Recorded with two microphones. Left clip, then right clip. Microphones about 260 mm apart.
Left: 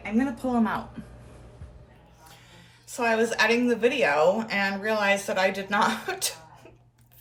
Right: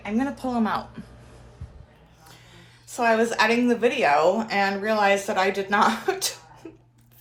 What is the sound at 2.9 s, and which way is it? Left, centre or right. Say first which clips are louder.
A woman's voice: right 3 dB; centre.